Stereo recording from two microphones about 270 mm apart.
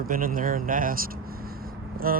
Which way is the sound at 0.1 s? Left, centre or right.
Right.